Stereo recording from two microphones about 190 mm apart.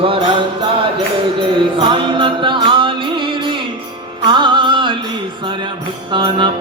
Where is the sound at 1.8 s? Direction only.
25° right (ahead or behind).